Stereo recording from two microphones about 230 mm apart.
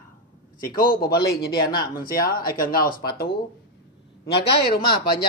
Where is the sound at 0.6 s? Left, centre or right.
Left.